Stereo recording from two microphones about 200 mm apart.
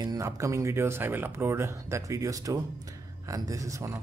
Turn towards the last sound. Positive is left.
turn(degrees=-15)  # may be behind; listen again after turning